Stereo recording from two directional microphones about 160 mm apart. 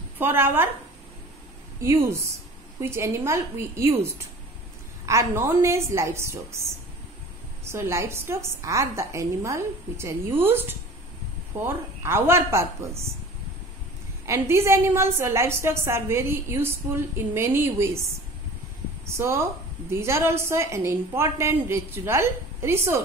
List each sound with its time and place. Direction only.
0.2 s a woman's voice: 15° right (ahead or behind)
1.8 s a woman's voice: 15° right (ahead or behind)
14.2 s a woman's voice: 15° right (ahead or behind)
19.1 s a woman's voice: 15° right (ahead or behind)